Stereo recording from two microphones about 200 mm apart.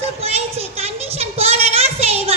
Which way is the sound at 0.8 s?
30° right (ahead or behind).